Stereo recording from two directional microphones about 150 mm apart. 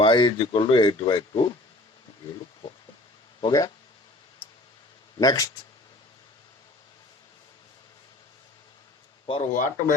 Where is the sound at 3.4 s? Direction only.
30° left (ahead or behind).